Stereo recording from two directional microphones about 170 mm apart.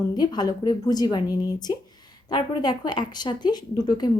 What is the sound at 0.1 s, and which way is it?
Speech, 25° left (ahead or behind).